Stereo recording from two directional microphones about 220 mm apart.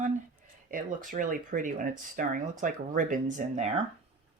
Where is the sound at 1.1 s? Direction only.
35° right (ahead or behind).